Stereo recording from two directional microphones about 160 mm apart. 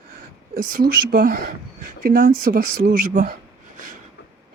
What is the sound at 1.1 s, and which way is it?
Speech, 60° right (ahead or behind).